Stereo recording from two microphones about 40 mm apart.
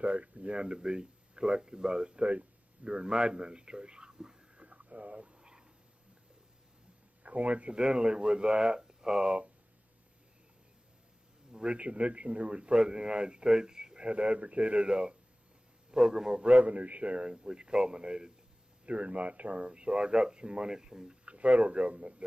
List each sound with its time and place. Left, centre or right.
0.0 s a man's voice: right; by 4.4 s centre
4.6 s a sound: right
7.2 s speech: right
7.7 s a man's voice: right
11.5 s a man's voice: right
16.4 s a man's voice: right
18.9 s a man's voice: right; by 21.2 s centre
21.3 s speech: right